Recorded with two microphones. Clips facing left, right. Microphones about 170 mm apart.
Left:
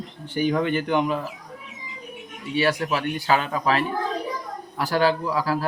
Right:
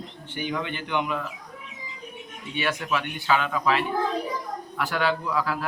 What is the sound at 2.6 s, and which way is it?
Speech, 35° left (ahead or behind).